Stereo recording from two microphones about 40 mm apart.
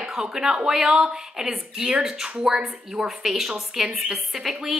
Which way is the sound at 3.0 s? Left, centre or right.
Centre.